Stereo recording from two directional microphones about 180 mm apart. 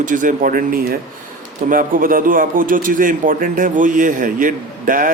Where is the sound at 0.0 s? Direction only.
45° right (ahead or behind).